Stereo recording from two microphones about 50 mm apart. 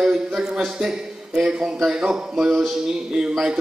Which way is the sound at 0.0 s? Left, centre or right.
Centre.